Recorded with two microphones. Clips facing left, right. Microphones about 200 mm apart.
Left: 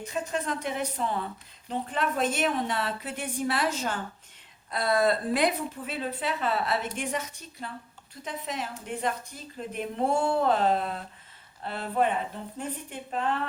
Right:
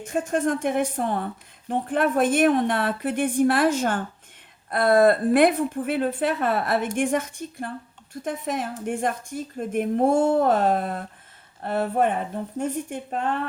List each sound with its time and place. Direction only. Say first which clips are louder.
0.0 s speech: right 8 dB; 50° right (ahead or behind)